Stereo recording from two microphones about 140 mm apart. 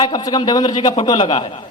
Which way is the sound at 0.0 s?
30° left (ahead or behind).